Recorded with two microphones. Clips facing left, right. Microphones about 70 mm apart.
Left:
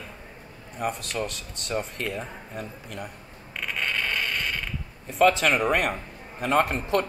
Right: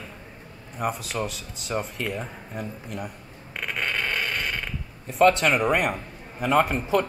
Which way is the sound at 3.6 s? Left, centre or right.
Centre.